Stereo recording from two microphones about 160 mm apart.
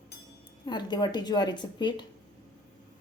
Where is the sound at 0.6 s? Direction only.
25° left (ahead or behind).